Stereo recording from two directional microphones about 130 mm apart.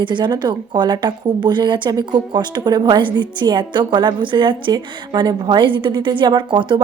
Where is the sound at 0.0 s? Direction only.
35° right (ahead or behind).